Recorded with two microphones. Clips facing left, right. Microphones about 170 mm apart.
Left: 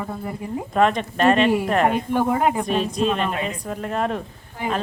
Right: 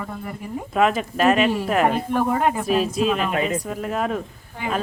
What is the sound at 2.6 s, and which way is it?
Speech, 5° right (ahead or behind).